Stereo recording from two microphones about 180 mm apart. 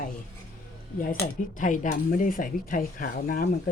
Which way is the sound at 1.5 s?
45° left (ahead or behind).